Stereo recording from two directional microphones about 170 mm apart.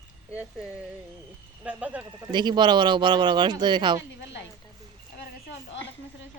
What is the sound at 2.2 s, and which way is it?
Speech, 25° right (ahead or behind).